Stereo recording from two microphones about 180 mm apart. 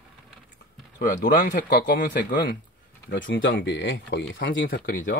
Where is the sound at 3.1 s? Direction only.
90° left.